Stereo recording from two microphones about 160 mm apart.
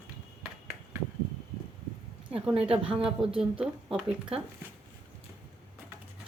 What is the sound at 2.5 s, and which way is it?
Speech, 35° right (ahead or behind).